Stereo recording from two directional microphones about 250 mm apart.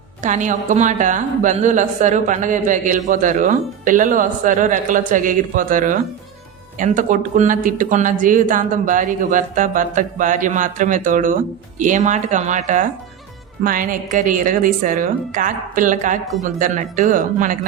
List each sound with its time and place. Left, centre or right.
0.2 s a woman's voice: right